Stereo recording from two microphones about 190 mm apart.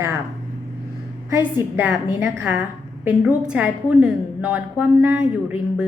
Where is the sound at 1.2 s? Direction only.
10° right (ahead or behind).